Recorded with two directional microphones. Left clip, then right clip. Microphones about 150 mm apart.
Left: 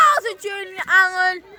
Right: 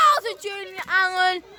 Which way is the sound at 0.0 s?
5° left (ahead or behind).